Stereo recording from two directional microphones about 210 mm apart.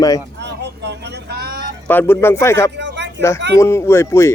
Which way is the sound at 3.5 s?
15° left (ahead or behind).